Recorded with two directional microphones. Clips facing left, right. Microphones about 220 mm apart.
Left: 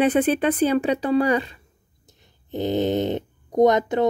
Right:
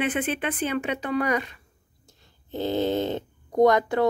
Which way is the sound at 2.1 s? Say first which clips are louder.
Left 3 dB; 20° left (ahead or behind).